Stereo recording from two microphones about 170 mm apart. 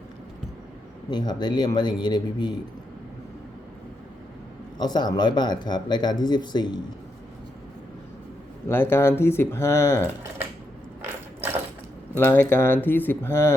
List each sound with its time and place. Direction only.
1.1 s speech: 25° left (ahead or behind)
4.8 s speech: 25° left (ahead or behind)
8.6 s speech: 15° left (ahead or behind)
11.0 s ratchet: 10° right (ahead or behind)
12.1 s speech: 10° left (ahead or behind)